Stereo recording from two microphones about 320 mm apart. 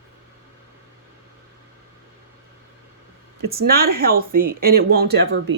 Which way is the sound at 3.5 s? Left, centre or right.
Right.